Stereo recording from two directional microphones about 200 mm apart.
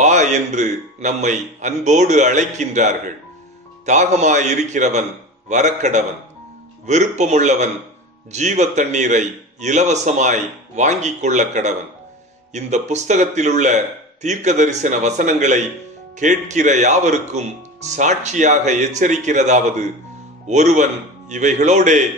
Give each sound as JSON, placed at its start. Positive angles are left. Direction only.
{"t": 0.0, "sound": "speech", "side_deg": -35}